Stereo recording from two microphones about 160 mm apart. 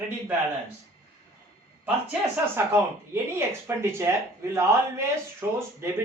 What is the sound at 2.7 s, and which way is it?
A woman's voice, 15° right (ahead or behind).